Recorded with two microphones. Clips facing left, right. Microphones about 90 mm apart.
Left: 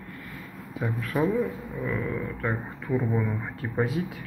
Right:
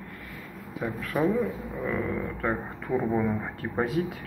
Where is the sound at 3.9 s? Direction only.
25° left (ahead or behind).